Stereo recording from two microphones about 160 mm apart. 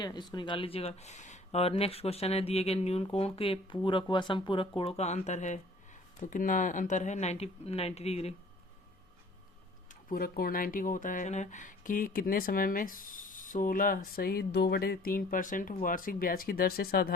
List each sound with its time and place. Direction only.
0.0 s speech: 25° left (ahead or behind)
9.9 s speech: 65° left (ahead or behind)